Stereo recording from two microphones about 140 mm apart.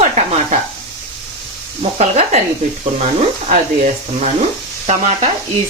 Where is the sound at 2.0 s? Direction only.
50° right (ahead or behind).